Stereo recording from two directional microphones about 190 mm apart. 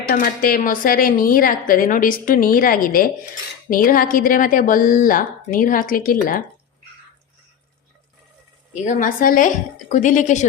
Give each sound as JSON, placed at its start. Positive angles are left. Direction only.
{"t": 0.1, "sound": "speech", "side_deg": 50}
{"t": 8.7, "sound": "a woman's voice", "side_deg": 40}